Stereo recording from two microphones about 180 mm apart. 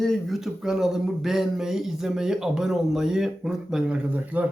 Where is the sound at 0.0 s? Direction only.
Centre (ahead or behind).